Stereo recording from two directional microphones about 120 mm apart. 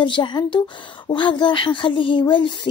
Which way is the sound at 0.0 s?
40° left (ahead or behind).